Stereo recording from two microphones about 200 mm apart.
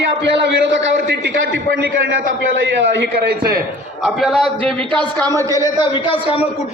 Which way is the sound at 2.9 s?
60° right (ahead or behind).